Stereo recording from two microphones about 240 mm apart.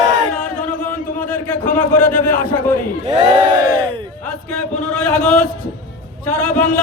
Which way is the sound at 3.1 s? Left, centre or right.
Centre.